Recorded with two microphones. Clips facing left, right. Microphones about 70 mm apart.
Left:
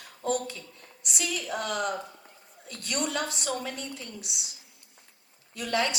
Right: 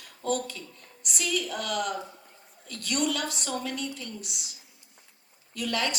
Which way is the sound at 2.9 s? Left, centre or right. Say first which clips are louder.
Right 2 dB; left.